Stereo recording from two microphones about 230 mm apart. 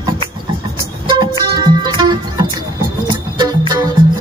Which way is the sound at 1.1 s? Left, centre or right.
Centre.